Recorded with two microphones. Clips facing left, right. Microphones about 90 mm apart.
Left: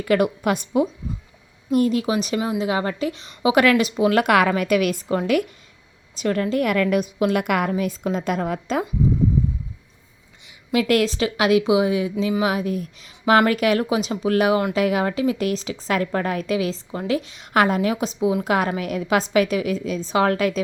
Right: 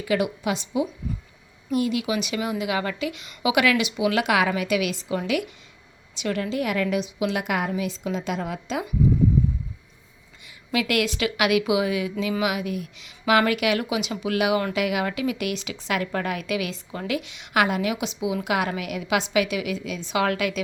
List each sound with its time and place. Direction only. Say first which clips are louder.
0.0 s a woman's voice: left 5 dB; 50° left (ahead or behind)
10.7 s a woman's voice: left 5 dB; 35° left (ahead or behind)